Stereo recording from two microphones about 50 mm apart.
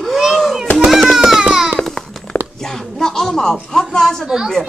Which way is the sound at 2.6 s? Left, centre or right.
Centre.